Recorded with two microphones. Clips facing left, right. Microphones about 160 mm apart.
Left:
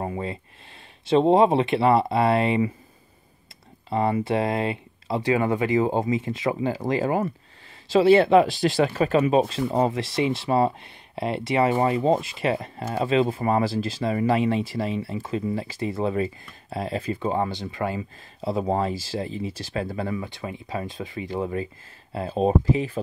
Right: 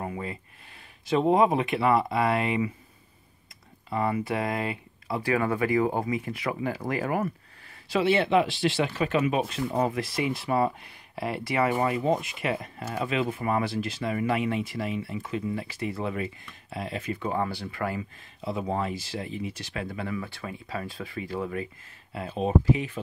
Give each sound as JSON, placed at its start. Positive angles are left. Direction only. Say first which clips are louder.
{"t": 0.0, "sound": "a sound", "louder": "left 4 dB", "side_deg": 30}
{"t": 1.0, "sound": "speech", "louder": "left 4 dB", "side_deg": 30}
{"t": 3.9, "sound": "speech", "louder": "left 5 dB", "side_deg": 30}
{"t": 7.9, "sound": "speech", "louder": "left 7 dB", "side_deg": 35}
{"t": 18.4, "sound": "speech", "louder": "left 5 dB", "side_deg": 35}
{"t": 20.2, "sound": "speech", "louder": "left 3 dB", "side_deg": 20}